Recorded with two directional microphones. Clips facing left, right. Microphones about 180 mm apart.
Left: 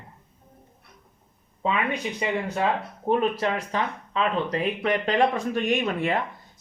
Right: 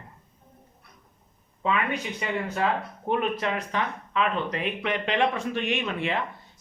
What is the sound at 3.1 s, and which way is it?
Speech, 35° left (ahead or behind).